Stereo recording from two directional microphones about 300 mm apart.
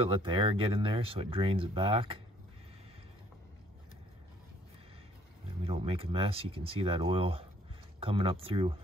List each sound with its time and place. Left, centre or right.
0.0 s speech: centre
5.6 s speech: centre